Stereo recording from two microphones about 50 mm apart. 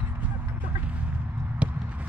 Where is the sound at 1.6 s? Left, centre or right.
Right.